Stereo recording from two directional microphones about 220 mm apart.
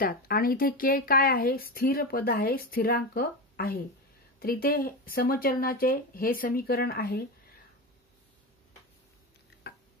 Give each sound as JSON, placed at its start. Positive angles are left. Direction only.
{"t": 0.0, "sound": "speech", "side_deg": 40}